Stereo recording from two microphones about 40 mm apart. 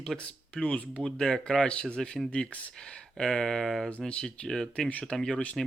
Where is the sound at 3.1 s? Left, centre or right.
Centre.